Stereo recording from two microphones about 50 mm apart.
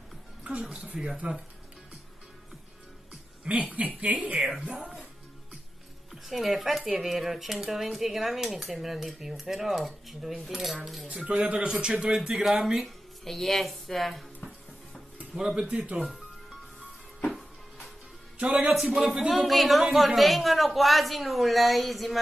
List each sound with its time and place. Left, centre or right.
1.0 s speech: centre
3.4 s speech: right
6.2 s speech: centre
11.2 s speech: right; by 12.8 s centre
12.8 s speech: centre
15.3 s speech: centre
17.3 s music: centre
18.4 s speech: right
18.9 s speech: centre